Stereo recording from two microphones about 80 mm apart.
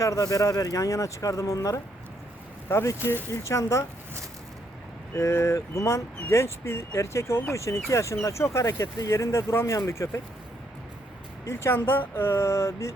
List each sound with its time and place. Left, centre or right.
0.0 s speech: left
2.6 s speech: left
5.1 s speech: left
11.4 s speech: left